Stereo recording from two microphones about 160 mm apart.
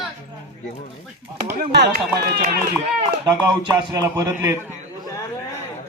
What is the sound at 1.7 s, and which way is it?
Speech, 90° right.